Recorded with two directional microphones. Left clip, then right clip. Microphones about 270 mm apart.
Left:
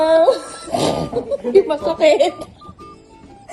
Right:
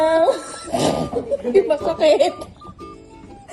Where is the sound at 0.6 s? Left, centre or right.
Left.